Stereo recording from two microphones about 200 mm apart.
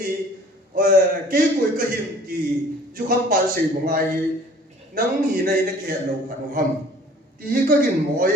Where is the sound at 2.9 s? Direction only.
45° right (ahead or behind).